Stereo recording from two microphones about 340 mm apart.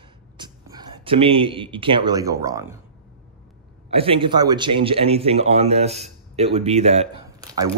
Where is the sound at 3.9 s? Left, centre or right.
Centre.